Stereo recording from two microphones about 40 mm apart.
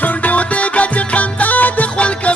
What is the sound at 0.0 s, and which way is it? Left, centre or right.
Music, left.